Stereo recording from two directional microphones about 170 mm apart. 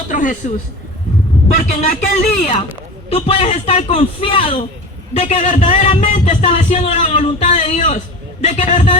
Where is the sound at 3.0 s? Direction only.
35° left (ahead or behind).